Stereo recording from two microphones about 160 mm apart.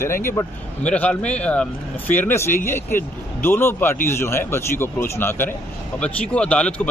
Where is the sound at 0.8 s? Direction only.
10° left (ahead or behind).